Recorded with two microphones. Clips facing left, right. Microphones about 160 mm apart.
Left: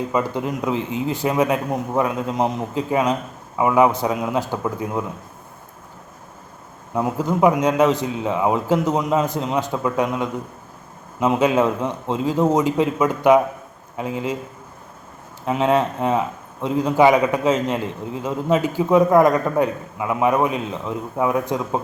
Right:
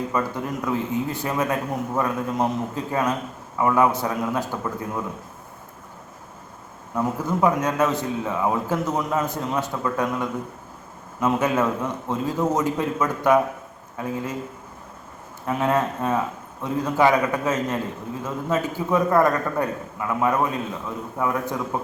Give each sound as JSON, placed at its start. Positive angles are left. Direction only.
{"t": 0.1, "sound": "a man's voice", "side_deg": 20}
{"t": 6.9, "sound": "a man's voice", "side_deg": 15}
{"t": 15.4, "sound": "a man's voice", "side_deg": 20}